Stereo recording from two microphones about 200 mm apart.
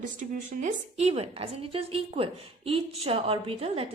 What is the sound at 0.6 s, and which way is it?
A woman's voice, 30° right (ahead or behind).